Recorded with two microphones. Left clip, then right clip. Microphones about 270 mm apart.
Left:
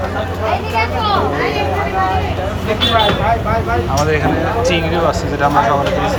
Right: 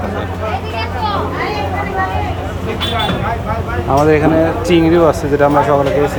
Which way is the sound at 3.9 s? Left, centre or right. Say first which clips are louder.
Right 8 dB; right.